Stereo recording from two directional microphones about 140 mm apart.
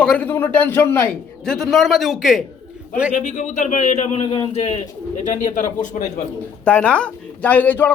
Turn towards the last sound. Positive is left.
turn(degrees=15)  # may be behind; listen again after turning